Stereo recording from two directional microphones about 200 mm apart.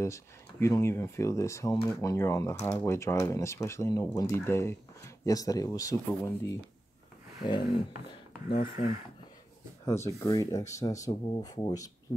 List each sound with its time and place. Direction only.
0.0 s speech: 15° left (ahead or behind)
8.5 s speech: 45° left (ahead or behind)
9.8 s speech: 15° left (ahead or behind)